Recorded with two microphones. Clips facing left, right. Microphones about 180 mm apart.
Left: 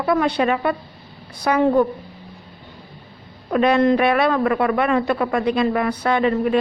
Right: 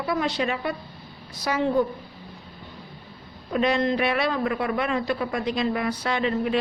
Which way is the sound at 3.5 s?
60° left (ahead or behind).